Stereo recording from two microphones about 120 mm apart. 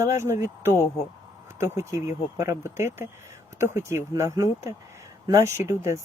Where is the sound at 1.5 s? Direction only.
20° right (ahead or behind).